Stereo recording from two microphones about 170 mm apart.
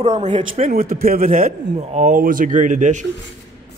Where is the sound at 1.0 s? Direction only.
55° right (ahead or behind).